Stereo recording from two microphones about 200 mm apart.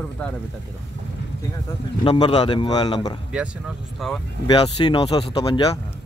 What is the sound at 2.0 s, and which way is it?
Speech, 25° left (ahead or behind).